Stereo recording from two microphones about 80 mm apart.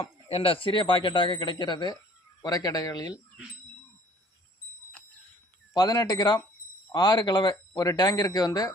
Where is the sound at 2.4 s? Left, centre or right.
Left.